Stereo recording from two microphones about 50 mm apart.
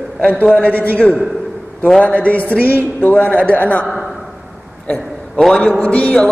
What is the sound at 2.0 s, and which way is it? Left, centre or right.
Speech, left.